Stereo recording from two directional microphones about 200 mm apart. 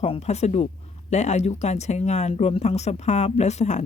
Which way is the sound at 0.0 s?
30° left (ahead or behind).